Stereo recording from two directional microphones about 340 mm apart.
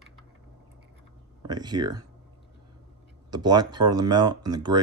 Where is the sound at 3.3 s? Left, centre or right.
Centre.